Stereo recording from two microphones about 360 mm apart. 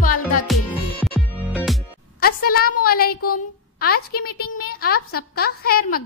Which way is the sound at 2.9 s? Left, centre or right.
Left.